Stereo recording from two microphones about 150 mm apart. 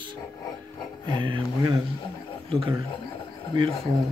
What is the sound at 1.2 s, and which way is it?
Music, 30° right (ahead or behind).